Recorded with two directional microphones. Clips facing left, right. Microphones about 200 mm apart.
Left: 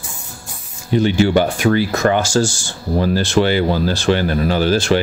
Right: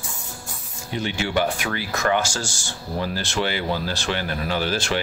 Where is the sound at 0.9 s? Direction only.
35° left (ahead or behind).